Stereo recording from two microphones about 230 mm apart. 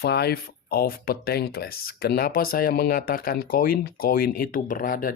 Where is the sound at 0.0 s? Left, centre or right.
Left.